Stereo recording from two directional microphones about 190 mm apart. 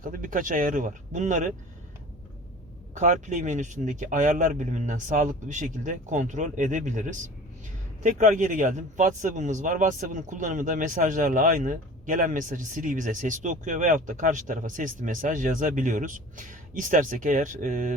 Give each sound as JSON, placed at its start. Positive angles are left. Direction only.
{"t": 0.0, "sound": "speech", "side_deg": -45}
{"t": 3.0, "sound": "speech", "side_deg": -40}